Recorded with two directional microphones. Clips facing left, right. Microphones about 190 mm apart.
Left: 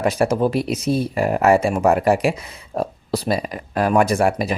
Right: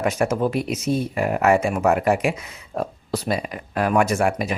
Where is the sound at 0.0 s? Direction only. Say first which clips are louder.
Left 3 dB; 35° left (ahead or behind).